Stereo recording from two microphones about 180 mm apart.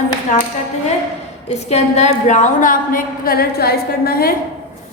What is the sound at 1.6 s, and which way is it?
A woman's voice, 40° left (ahead or behind).